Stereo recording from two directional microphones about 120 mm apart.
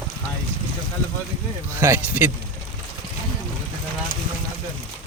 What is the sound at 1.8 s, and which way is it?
Speech, 20° right (ahead or behind).